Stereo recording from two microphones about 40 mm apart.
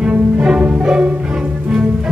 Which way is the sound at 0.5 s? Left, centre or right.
Centre.